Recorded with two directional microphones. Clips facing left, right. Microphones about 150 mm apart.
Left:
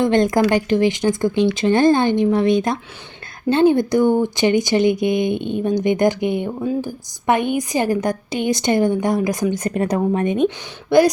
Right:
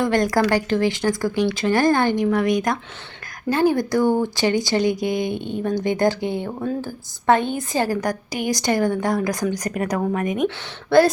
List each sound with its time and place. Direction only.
0.0 s speech: 20° left (ahead or behind)